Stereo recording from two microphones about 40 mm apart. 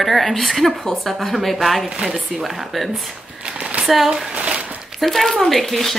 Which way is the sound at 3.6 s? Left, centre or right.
Right.